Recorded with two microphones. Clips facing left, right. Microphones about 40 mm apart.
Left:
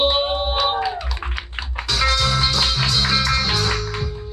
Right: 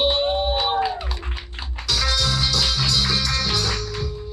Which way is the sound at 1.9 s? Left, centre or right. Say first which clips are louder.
Left 3 dB; centre.